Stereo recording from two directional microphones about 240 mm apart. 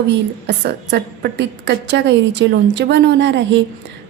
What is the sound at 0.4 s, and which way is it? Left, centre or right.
A woman's voice, right.